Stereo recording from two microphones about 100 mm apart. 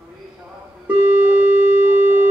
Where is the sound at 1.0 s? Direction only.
20° right (ahead or behind).